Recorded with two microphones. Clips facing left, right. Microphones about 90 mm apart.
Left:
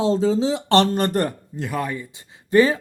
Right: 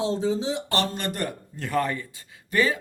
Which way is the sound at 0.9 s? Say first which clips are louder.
Left 9 dB; 40° left (ahead or behind).